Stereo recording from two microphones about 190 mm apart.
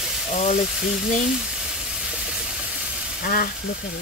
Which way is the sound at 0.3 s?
45° left (ahead or behind).